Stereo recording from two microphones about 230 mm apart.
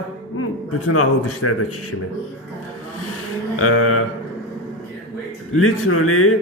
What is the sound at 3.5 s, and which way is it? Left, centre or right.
Mantra, left.